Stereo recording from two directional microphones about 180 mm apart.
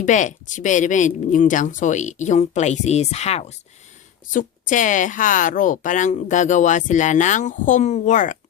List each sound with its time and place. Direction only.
0.0 s a woman's voice: 45° left (ahead or behind)